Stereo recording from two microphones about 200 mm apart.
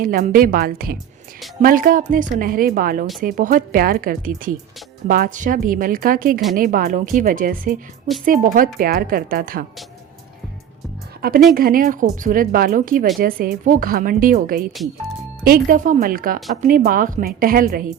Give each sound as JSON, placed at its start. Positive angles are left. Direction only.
{"t": 0.0, "sound": "speech", "side_deg": -45}
{"t": 11.5, "sound": "speech", "side_deg": -45}